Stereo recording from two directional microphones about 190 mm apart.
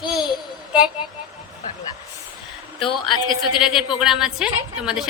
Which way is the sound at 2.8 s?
25° left (ahead or behind).